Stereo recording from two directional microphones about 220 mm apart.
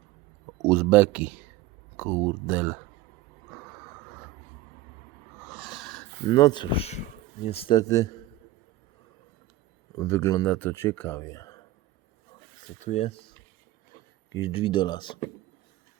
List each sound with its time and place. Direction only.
0.6 s speech: 10° right (ahead or behind)
5.5 s dog: centre (ahead or behind)
6.2 s speech: 20° left (ahead or behind)
10.0 s speech: 15° left (ahead or behind)
12.8 s speech: 30° left (ahead or behind)
14.4 s speech: 25° left (ahead or behind)